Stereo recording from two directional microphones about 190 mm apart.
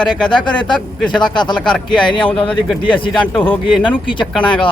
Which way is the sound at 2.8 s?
25° left (ahead or behind).